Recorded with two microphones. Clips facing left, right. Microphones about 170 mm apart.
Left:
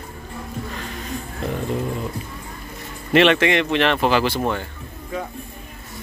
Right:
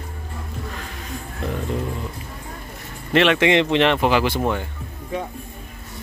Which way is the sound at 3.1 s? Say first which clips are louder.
Left 2 dB; centre (ahead or behind).